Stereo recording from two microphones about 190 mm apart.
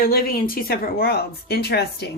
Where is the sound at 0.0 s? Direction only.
50° left (ahead or behind).